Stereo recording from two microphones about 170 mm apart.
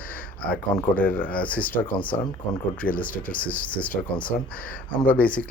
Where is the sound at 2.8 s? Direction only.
50° left (ahead or behind).